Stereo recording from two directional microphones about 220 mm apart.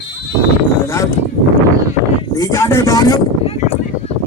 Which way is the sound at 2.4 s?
15° left (ahead or behind).